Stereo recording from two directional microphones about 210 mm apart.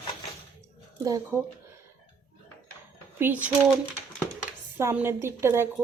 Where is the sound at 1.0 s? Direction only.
15° right (ahead or behind).